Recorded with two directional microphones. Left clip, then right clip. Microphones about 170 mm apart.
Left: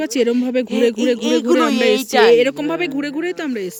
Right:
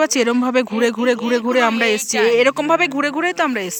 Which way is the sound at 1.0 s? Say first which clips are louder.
Even; 60° left (ahead or behind).